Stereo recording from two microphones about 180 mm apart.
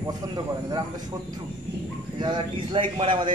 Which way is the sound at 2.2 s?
25° right (ahead or behind).